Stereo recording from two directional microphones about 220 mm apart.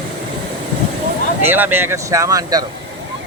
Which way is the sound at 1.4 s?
10° right (ahead or behind).